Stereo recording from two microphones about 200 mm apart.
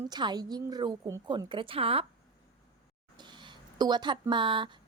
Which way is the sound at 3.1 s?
20° right (ahead or behind).